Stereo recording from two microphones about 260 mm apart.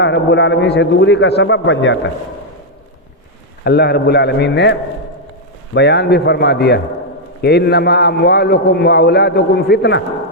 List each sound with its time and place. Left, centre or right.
0.0 s a man's voice: left
3.6 s a man's voice: left